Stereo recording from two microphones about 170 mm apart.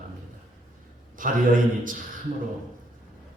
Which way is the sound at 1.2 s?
50° right (ahead or behind).